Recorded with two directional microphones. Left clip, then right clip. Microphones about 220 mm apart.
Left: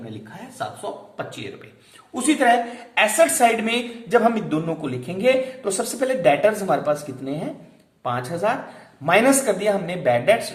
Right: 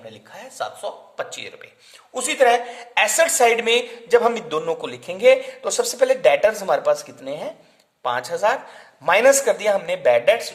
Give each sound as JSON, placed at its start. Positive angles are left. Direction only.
{"t": 0.3, "sound": "a woman's voice", "side_deg": -50}